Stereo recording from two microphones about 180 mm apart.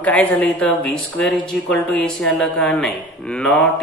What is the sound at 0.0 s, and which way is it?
Speech, 10° left (ahead or behind).